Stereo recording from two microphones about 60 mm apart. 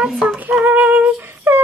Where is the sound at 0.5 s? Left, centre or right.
Right.